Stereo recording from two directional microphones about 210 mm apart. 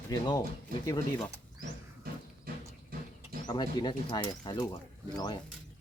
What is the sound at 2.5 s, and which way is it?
Music, 45° right (ahead or behind).